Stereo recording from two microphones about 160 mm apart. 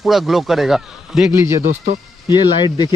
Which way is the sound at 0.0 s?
Centre (ahead or behind).